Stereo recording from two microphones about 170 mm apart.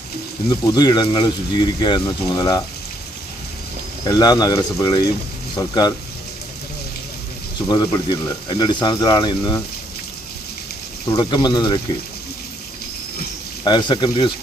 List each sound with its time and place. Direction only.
0.7 s speech: 25° left (ahead or behind)
4.0 s speech: 20° left (ahead or behind)
7.7 s speech: 25° left (ahead or behind)
11.1 s speech: 25° left (ahead or behind)
13.7 s speech: 25° left (ahead or behind)